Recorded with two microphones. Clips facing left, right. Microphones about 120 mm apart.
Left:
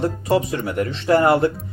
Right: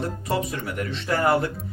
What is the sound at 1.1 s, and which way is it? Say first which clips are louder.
Speech: left 6 dB; 30° left (ahead or behind).